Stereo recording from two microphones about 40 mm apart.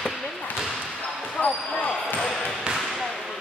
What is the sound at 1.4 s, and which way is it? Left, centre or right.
Basketball bounce, left.